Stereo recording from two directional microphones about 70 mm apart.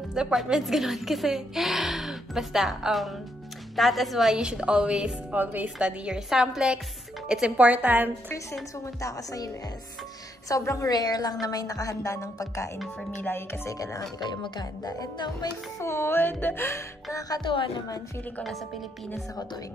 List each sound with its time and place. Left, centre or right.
0.1 s a woman's voice: centre
5.4 s speech: right
5.8 s a woman's voice: centre
8.8 s speech: left
10.5 s a woman's voice: left
10.9 s speech: left
13.2 s music: left
13.7 s a woman's voice: left
14.2 s speech: left
15.8 s music: left